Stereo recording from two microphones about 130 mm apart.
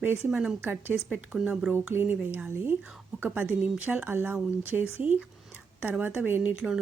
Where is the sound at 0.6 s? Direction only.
15° right (ahead or behind).